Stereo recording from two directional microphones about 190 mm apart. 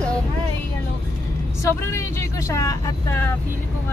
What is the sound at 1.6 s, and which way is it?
Speech, 15° left (ahead or behind).